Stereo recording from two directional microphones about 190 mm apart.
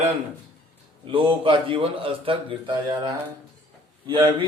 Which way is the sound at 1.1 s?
25° right (ahead or behind).